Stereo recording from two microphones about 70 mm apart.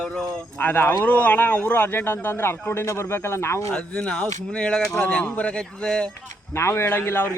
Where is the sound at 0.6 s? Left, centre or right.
Left.